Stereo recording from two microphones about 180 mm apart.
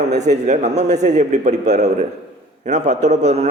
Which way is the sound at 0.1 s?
40° right (ahead or behind).